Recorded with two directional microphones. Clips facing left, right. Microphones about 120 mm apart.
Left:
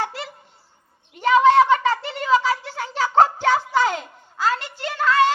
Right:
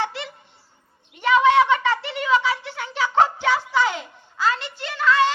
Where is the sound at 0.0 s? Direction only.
40° left (ahead or behind).